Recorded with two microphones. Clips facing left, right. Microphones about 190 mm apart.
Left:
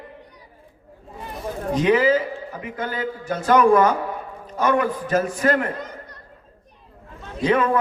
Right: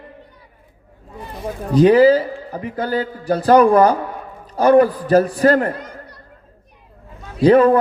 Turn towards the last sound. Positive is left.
turn(degrees=-35)  # may be behind; listen again after turning